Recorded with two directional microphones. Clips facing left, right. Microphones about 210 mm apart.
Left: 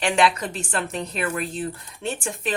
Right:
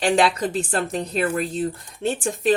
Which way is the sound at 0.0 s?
35° right (ahead or behind).